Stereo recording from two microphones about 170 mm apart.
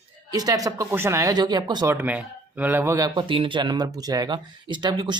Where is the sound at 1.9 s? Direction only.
10° right (ahead or behind).